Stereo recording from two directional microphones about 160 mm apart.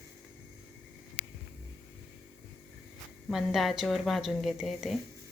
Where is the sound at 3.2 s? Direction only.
Centre (ahead or behind).